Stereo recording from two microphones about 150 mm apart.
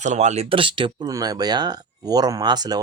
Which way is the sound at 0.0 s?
50° right (ahead or behind).